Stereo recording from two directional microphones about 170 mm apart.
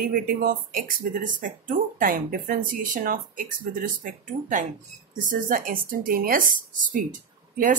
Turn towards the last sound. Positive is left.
turn(degrees=-50)  # may be behind; listen again after turning